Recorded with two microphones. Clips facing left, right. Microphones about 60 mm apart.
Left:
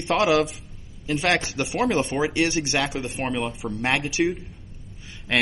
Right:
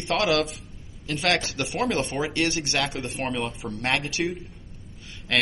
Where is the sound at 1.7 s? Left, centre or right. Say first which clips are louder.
Left 3 dB; centre.